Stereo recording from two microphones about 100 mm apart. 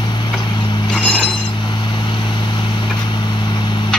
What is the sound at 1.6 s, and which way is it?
Vehicle, 50° left (ahead or behind).